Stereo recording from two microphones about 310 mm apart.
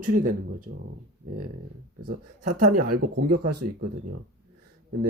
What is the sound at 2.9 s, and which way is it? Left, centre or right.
Speech, right.